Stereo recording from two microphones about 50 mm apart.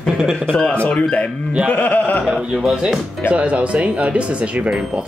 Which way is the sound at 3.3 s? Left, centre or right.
Right.